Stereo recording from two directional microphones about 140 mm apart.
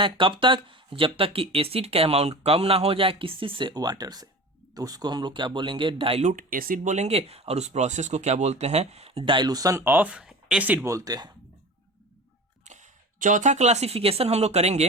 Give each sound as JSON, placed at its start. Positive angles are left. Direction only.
{"t": 0.0, "sound": "speech", "side_deg": -40}
{"t": 6.2, "sound": "speech", "side_deg": -75}
{"t": 6.9, "sound": "speech", "side_deg": -50}
{"t": 12.6, "sound": "speech", "side_deg": -60}